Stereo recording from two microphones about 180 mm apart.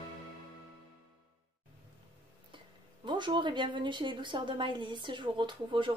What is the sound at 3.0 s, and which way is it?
A woman's voice, 25° right (ahead or behind).